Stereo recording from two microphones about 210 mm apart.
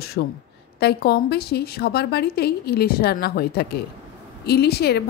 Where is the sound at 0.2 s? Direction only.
50° left (ahead or behind).